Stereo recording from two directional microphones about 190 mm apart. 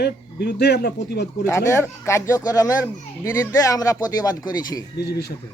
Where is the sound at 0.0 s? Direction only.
60° left (ahead or behind).